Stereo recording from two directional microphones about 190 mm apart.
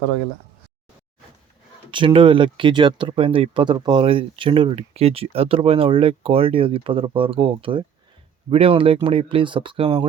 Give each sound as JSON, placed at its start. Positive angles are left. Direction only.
{"t": 1.9, "sound": "speech", "side_deg": -25}